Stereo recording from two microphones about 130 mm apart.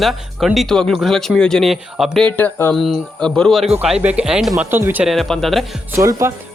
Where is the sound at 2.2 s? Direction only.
15° left (ahead or behind).